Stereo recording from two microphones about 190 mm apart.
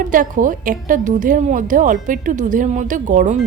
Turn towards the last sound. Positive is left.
turn(degrees=-40)  # may be behind; listen again after turning